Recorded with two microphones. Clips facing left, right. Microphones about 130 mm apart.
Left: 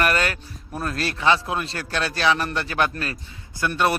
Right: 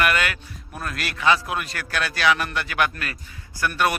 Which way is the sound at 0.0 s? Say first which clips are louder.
Left 1 dB; 35° left (ahead or behind).